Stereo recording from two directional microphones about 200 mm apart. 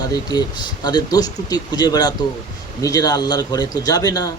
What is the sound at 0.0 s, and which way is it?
Speech, 20° left (ahead or behind).